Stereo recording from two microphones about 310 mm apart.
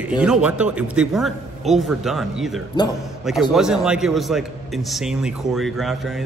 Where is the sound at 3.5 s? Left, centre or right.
Centre.